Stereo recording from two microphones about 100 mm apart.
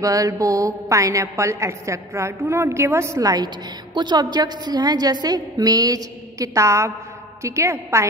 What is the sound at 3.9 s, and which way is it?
A woman's voice, 45° right (ahead or behind).